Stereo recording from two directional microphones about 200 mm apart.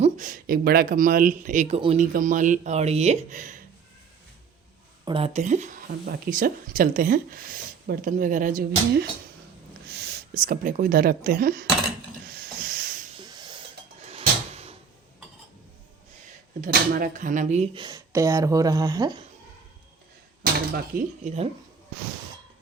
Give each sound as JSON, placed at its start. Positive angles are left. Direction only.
{"t": 0.0, "sound": "speech", "side_deg": -40}
{"t": 5.0, "sound": "speech", "side_deg": -25}
{"t": 9.9, "sound": "a sound", "side_deg": -55}
{"t": 10.4, "sound": "speech", "side_deg": -45}
{"t": 12.3, "sound": "hiss", "side_deg": -50}
{"t": 13.1, "sound": "a sound", "side_deg": -20}
{"t": 16.6, "sound": "speech", "side_deg": -45}
{"t": 17.8, "sound": "speech", "side_deg": -15}
{"t": 20.4, "sound": "speech", "side_deg": -50}
{"t": 21.2, "sound": "speech", "side_deg": -30}